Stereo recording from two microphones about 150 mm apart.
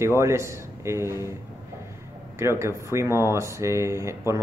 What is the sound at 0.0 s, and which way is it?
Speech, 20° right (ahead or behind).